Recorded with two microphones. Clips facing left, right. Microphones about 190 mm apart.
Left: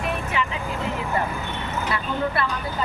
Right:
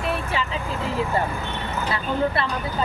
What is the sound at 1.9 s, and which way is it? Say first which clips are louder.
Speech: right 3 dB; 25° right (ahead or behind).